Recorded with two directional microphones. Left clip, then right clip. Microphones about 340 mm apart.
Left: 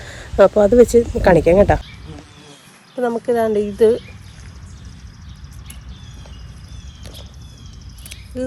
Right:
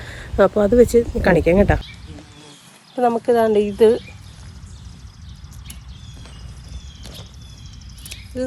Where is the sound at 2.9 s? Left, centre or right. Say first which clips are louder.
Right 2 dB; centre.